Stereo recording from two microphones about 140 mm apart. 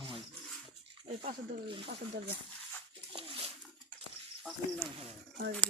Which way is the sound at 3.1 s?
40° right (ahead or behind).